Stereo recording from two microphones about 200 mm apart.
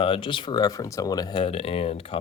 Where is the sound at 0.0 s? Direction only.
25° left (ahead or behind).